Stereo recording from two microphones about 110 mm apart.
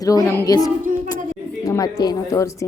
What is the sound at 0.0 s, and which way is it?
A woman's voice, 30° left (ahead or behind).